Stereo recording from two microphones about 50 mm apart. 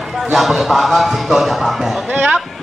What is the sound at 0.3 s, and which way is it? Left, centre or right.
A man's voice, centre.